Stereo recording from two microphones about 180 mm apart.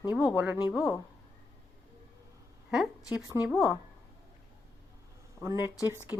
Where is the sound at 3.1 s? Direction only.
5° right (ahead or behind).